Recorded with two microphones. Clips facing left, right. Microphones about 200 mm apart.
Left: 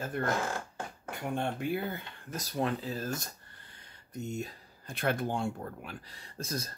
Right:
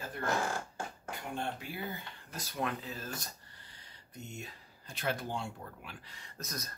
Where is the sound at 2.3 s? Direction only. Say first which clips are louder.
Left 5 dB; 35° left (ahead or behind).